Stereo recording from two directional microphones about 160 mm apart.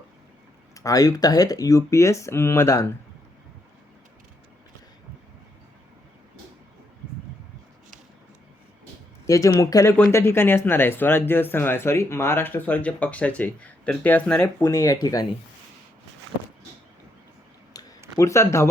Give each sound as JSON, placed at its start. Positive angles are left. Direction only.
{"t": 0.7, "sound": "speech", "side_deg": 20}
{"t": 9.2, "sound": "speech", "side_deg": 20}
{"t": 17.7, "sound": "a sound", "side_deg": 20}
{"t": 18.2, "sound": "speech", "side_deg": 20}